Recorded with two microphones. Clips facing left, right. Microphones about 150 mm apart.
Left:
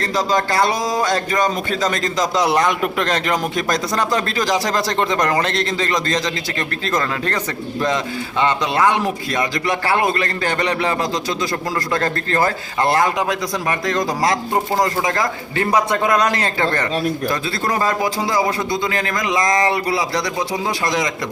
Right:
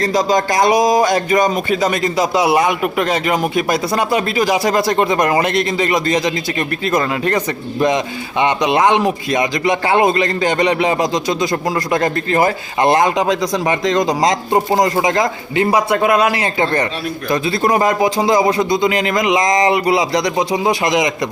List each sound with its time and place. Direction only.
0.0 s a man's voice: 15° right (ahead or behind)